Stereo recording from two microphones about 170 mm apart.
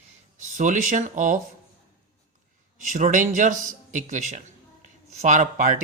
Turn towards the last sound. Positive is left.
turn(degrees=-50)  # may be behind; listen again after turning